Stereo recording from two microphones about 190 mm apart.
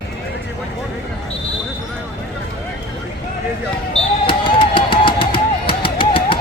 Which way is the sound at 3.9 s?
25° left (ahead or behind).